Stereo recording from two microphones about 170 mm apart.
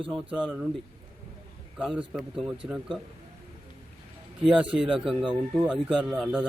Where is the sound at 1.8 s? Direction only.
5° right (ahead or behind).